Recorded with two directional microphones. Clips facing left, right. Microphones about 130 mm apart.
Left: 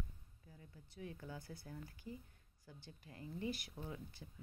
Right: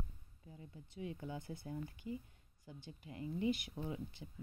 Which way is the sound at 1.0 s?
20° right (ahead or behind).